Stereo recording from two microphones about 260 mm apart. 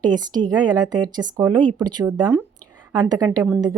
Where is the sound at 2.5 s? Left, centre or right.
Right.